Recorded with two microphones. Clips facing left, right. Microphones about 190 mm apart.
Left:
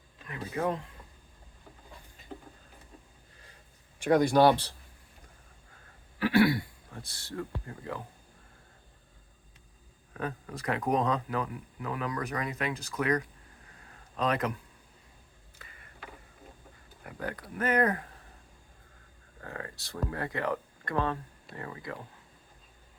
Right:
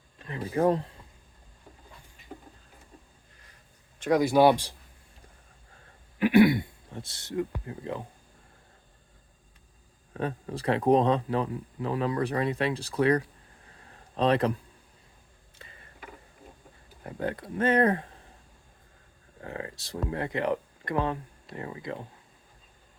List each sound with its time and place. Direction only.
0.3 s speech: 30° right (ahead or behind)
4.0 s speech: 5° right (ahead or behind)
6.1 s speech: 20° right (ahead or behind)
10.2 s speech: 30° right (ahead or behind)
15.5 s a sound: 30° right (ahead or behind)
17.0 s speech: 25° right (ahead or behind)
19.4 s speech: 20° right (ahead or behind)